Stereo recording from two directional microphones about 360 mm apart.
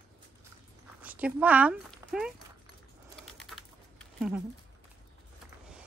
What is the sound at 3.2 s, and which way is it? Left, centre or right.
Bird, centre.